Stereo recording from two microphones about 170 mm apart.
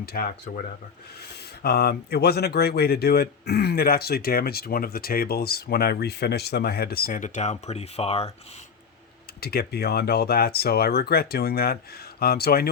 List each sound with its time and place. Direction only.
0.0 s speech: 60° left (ahead or behind)
1.6 s speech: 70° left (ahead or behind); by 8.3 s 35° left (ahead or behind)
9.4 s speech: 65° left (ahead or behind)